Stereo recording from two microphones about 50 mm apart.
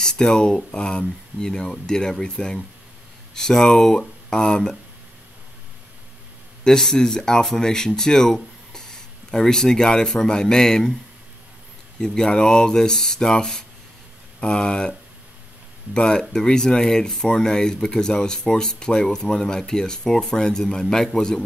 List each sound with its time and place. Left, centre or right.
0.0 s speech: centre
6.6 s speech: centre
12.0 s speech: centre